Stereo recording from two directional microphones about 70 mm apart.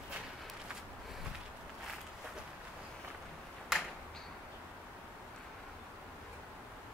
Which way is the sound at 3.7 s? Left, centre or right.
Centre.